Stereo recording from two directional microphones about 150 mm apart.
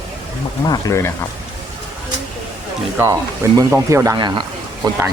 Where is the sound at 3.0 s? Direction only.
20° right (ahead or behind).